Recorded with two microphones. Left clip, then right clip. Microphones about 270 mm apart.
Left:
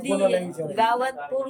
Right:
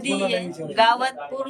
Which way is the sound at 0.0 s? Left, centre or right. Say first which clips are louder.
Left 2 dB; centre.